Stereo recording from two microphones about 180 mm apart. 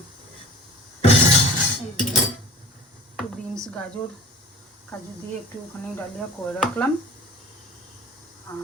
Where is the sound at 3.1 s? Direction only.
5° left (ahead or behind).